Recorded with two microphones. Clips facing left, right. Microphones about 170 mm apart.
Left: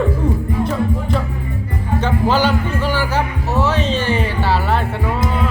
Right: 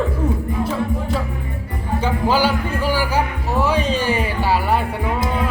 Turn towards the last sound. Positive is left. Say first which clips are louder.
# left 1 dB
turn(degrees=-10)  # may be behind; listen again after turning